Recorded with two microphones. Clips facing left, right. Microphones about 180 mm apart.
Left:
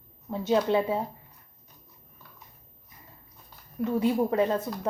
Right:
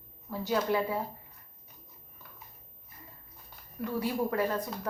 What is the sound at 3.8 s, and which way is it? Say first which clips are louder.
Speech: left 6 dB; 25° left (ahead or behind).